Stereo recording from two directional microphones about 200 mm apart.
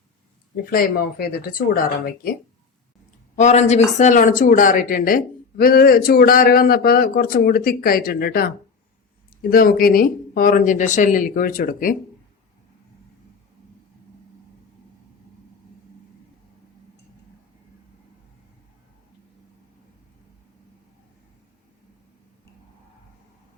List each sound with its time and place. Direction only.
0.5 s speech: 45° left (ahead or behind)
3.3 s speech: 35° left (ahead or behind)